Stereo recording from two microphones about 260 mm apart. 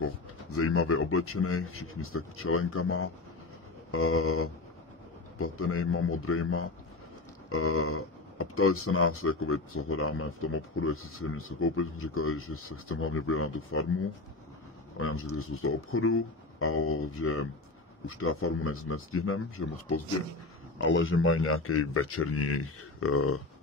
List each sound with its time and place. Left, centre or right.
0.0 s speech: left
15.0 s speech: left